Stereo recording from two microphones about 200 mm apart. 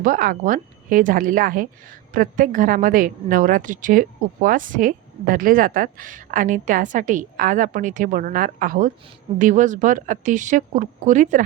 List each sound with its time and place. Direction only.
0.0 s a woman's voice: 45° right (ahead or behind)